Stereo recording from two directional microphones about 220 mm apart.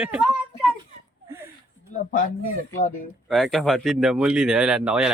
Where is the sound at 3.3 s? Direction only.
Centre (ahead or behind).